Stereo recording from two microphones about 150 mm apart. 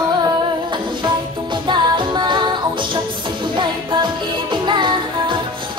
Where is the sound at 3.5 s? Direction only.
30° right (ahead or behind).